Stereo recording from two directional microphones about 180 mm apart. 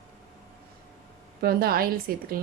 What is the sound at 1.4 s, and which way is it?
Speech, 55° right (ahead or behind).